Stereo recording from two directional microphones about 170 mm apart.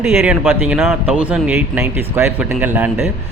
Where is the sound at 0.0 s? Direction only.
15° right (ahead or behind).